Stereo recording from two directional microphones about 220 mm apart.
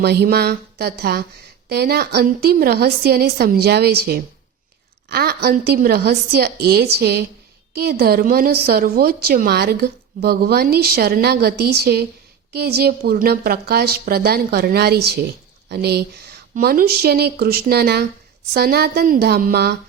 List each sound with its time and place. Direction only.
0.0 s a woman's voice: 50° right (ahead or behind)